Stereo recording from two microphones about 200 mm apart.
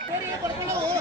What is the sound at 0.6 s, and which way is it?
Chatter, 15° right (ahead or behind).